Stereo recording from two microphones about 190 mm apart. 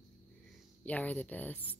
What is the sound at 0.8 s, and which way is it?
Speech, 10° left (ahead or behind).